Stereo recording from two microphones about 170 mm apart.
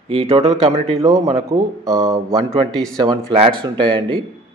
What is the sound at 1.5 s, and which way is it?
Speech, 20° right (ahead or behind).